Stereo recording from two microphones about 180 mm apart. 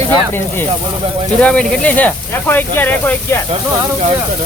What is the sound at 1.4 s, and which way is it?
Speech, 5° left (ahead or behind).